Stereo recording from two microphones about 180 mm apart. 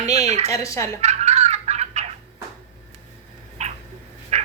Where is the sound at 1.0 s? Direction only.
40° right (ahead or behind).